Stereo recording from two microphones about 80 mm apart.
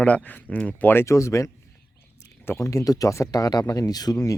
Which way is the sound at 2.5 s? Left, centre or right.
Left.